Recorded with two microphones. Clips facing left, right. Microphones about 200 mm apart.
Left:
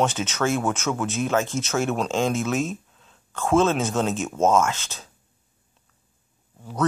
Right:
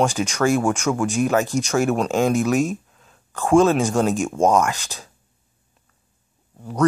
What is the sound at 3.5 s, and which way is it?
Speech, 15° right (ahead or behind).